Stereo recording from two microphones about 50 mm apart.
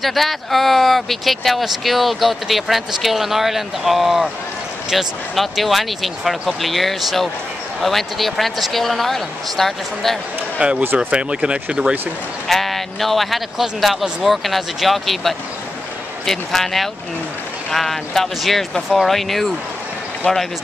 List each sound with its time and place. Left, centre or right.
0.0 s speech: centre
10.6 s speech: right
11.0 s speech: centre
12.4 s speech: centre